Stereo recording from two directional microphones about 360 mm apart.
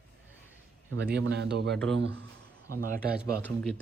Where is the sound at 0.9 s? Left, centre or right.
Right.